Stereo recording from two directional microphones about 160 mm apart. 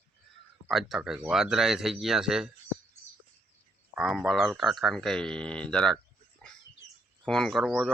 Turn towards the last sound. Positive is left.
turn(degrees=0)  # may be behind; listen again after turning